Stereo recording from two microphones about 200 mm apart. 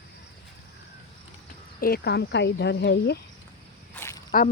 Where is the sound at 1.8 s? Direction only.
50° left (ahead or behind).